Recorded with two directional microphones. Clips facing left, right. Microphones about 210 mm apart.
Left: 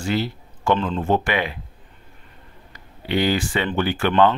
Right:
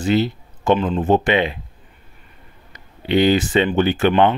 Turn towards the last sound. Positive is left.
turn(degrees=-20)  # may be behind; listen again after turning